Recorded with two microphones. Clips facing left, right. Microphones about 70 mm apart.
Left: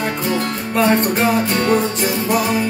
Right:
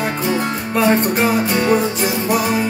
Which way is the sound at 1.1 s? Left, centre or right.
Centre.